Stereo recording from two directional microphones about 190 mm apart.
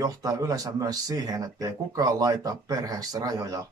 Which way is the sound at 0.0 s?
20° right (ahead or behind).